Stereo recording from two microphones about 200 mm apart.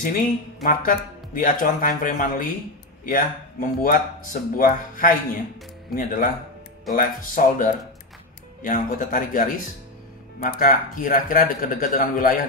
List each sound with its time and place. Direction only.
0.7 s speech: 45° left (ahead or behind)